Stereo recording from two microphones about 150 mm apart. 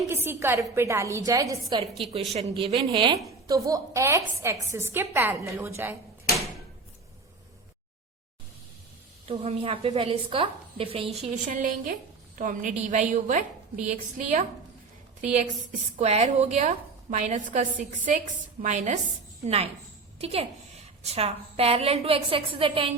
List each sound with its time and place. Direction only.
0.1 s a woman's voice: 15° right (ahead or behind)
2.0 s a woman's voice: 35° right (ahead or behind)
3.2 s a woman's voice: 25° right (ahead or behind)
9.2 s a woman's voice: 40° right (ahead or behind)
11.4 s a woman's voice: 60° right (ahead or behind)
16.0 s a woman's voice: 50° right (ahead or behind)
19.5 s a woman's voice: 40° right (ahead or behind)